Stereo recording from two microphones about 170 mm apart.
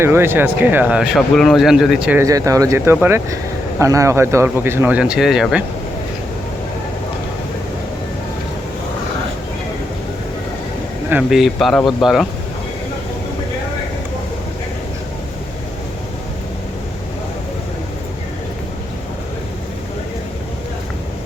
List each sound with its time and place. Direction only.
0.0 s speech: 15° right (ahead or behind)
2.2 s speech: 20° right (ahead or behind); by 5.6 s 5° right (ahead or behind)
11.1 s speech: 5° right (ahead or behind)